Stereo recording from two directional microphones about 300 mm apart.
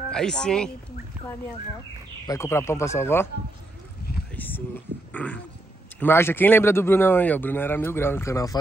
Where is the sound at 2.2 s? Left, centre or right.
Centre.